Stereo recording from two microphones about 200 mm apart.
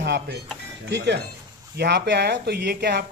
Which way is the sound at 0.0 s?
55° right (ahead or behind).